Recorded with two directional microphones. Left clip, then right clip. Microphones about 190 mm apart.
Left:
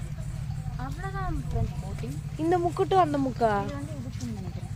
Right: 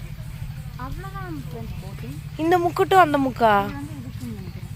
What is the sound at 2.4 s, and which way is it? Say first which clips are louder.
Speech: right 6 dB; 30° right (ahead or behind).